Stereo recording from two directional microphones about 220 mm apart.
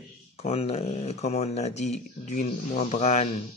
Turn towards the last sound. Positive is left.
turn(degrees=30)  # may be behind; listen again after turning